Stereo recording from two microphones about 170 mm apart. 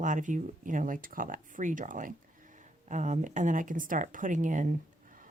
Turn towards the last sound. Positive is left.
turn(degrees=-45)  # may be behind; listen again after turning